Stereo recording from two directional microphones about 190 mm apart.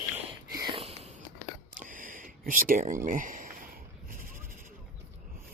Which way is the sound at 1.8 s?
45° right (ahead or behind).